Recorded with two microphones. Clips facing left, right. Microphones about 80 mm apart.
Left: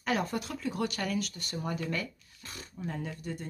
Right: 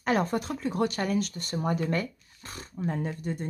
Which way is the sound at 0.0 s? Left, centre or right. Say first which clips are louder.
Right 5 dB; right.